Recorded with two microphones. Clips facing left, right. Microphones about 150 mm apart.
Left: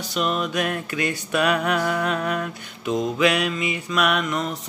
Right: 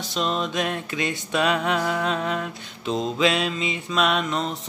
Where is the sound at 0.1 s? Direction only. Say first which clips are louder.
Left 1 dB; 25° right (ahead or behind).